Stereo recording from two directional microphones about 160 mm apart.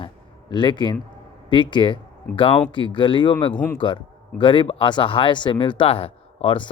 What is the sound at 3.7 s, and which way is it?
Speech, 30° left (ahead or behind).